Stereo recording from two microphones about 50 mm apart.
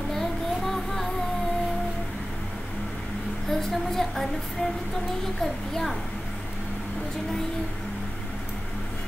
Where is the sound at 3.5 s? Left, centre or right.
Centre.